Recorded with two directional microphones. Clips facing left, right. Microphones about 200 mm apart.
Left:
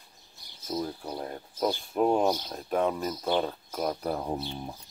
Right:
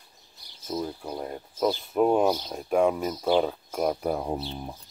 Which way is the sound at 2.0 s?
5° right (ahead or behind).